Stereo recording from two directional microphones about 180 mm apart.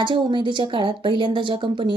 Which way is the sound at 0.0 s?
25° right (ahead or behind).